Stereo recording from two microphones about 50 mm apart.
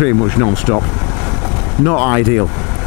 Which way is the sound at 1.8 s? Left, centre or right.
Left.